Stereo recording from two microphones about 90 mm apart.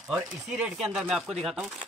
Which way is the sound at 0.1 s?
10° right (ahead or behind).